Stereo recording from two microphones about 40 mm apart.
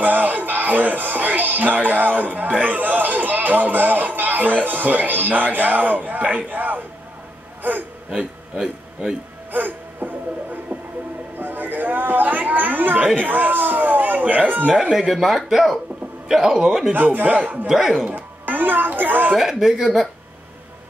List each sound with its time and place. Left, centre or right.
0.0 s speech: right
9.5 s a sound: right
13.2 s speech: right
14.7 s speech: centre
16.9 s speech: right
17.6 s speech: centre
18.0 s speech: right
19.5 s speech: centre